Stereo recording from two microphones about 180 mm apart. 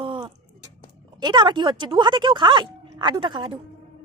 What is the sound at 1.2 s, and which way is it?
A woman's voice, 25° right (ahead or behind).